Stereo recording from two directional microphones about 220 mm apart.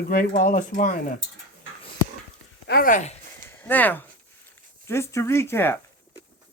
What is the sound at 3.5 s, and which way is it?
Speech, 10° left (ahead or behind).